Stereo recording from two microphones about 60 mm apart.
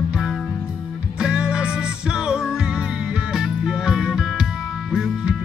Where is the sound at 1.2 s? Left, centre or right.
Centre.